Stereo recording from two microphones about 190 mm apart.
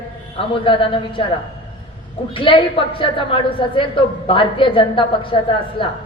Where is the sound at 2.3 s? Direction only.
25° left (ahead or behind).